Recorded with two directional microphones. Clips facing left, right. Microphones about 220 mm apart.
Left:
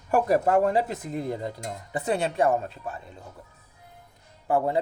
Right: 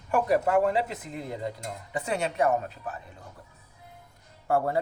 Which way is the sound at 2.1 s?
30° left (ahead or behind).